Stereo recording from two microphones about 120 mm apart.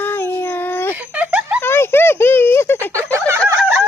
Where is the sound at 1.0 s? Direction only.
15° right (ahead or behind).